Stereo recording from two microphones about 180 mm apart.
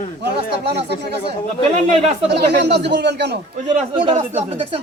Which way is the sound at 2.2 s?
70° right (ahead or behind).